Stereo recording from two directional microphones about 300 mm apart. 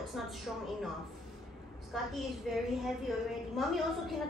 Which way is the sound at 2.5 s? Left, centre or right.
Centre.